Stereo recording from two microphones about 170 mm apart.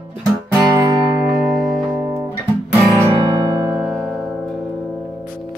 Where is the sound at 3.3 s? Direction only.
20° right (ahead or behind).